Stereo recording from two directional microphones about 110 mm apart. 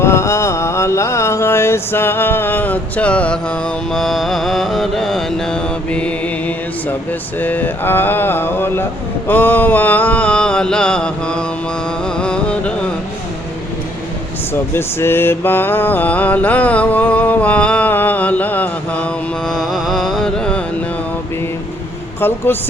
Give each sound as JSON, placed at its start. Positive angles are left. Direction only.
{"t": 0.0, "sound": "music", "side_deg": 25}
{"t": 3.9, "sound": "mantra", "side_deg": 0}
{"t": 7.3, "sound": "mantra", "side_deg": 15}
{"t": 14.7, "sound": "mantra", "side_deg": 20}
{"t": 19.5, "sound": "a sound", "side_deg": 0}
{"t": 22.5, "sound": "speech", "side_deg": 20}